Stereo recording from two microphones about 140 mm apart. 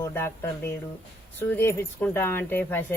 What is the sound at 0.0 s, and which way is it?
Speech, 20° left (ahead or behind).